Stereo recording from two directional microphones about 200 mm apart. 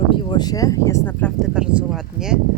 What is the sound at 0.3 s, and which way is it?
Speech, 20° left (ahead or behind).